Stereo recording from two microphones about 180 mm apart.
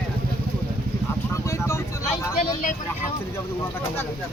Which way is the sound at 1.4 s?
15° left (ahead or behind).